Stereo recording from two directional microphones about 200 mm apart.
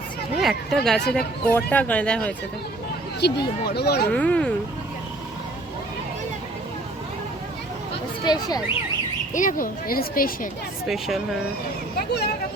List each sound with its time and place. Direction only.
0.3 s speech: centre (ahead or behind)
3.2 s speech: 55° left (ahead or behind)
4.1 s speech: 5° left (ahead or behind)
8.2 s speech: 20° left (ahead or behind)
9.3 s speech: 40° left (ahead or behind)
10.8 s speech: centre (ahead or behind)